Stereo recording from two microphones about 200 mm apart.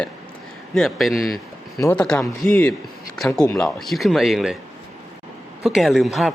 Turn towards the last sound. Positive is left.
turn(degrees=0)  # may be behind; listen again after turning